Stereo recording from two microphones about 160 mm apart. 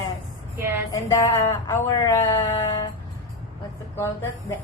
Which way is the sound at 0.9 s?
20° left (ahead or behind).